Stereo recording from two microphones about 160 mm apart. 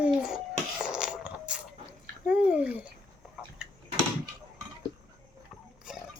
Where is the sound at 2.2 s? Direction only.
5° right (ahead or behind).